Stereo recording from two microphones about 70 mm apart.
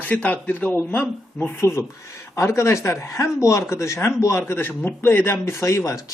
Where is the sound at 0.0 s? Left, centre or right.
Left.